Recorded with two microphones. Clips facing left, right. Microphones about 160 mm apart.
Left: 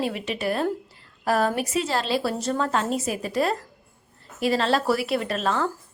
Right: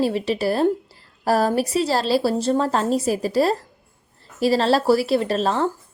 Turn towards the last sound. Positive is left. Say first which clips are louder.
# right 4 dB
turn(degrees=-30)  # may be behind; listen again after turning